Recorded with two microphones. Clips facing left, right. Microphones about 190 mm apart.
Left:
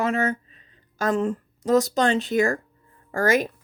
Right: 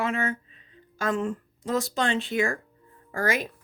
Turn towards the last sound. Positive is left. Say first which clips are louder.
# left 6 dB
turn(degrees=45)  # may be behind; listen again after turning